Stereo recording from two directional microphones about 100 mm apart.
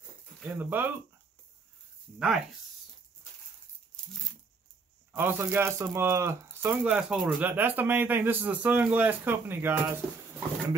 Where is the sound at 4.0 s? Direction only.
5° left (ahead or behind).